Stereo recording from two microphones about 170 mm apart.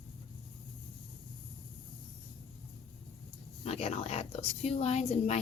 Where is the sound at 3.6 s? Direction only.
35° left (ahead or behind).